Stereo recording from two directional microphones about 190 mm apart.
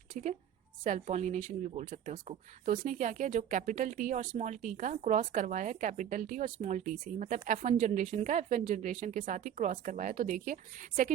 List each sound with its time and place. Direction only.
0.1 s a woman's voice: 40° right (ahead or behind)